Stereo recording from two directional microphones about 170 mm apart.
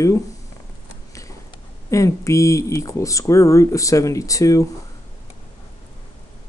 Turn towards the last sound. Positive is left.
turn(degrees=20)  # may be behind; listen again after turning